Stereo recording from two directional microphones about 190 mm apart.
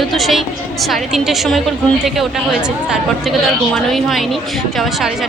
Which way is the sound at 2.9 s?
Centre (ahead or behind).